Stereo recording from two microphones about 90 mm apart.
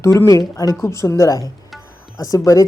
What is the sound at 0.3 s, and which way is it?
Speech, 40° left (ahead or behind).